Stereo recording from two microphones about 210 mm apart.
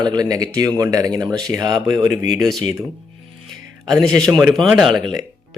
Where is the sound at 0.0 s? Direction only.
20° right (ahead or behind).